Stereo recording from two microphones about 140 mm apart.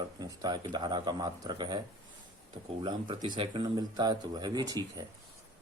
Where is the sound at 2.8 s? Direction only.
30° right (ahead or behind).